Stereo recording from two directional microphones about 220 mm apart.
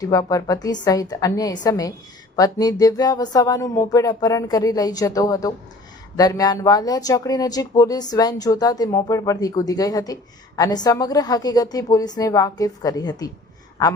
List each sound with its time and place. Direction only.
0.0 s speech: 15° left (ahead or behind)